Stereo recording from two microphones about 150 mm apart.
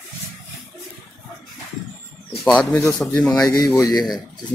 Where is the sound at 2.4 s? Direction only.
Centre (ahead or behind).